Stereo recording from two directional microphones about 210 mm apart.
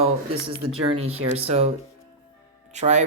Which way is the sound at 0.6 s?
90° right.